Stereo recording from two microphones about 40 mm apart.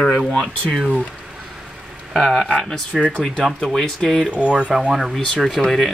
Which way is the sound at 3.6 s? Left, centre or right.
Centre.